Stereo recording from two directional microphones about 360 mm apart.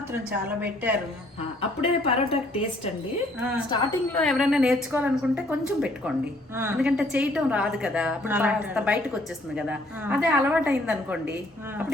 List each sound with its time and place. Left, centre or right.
0.1 s a woman's voice: centre
1.8 s speech: centre
3.7 s a woman's voice: centre